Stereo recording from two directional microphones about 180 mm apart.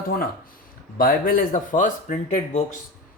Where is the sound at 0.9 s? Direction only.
55° left (ahead or behind).